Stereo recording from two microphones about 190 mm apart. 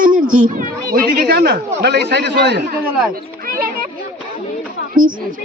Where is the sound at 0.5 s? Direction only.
45° right (ahead or behind).